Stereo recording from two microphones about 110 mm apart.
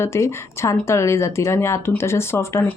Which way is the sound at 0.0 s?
25° left (ahead or behind).